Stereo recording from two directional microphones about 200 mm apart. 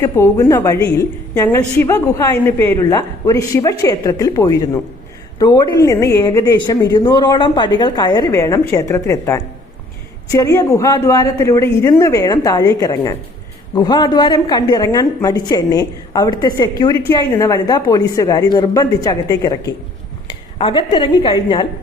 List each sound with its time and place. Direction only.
0.0 s a woman's voice: 15° left (ahead or behind)